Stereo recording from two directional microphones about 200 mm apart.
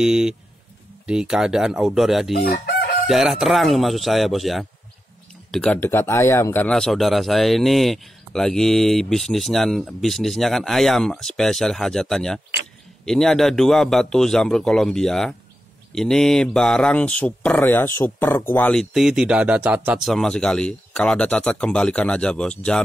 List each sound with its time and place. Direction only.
0.0 s speech: 5° right (ahead or behind)
2.5 s chicken: 55° left (ahead or behind)
3.1 s speech: centre (ahead or behind)